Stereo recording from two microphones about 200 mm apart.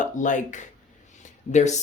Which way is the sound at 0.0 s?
40° left (ahead or behind).